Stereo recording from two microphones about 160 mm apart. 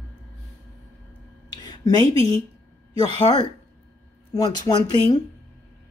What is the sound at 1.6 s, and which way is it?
Speech, 25° left (ahead or behind).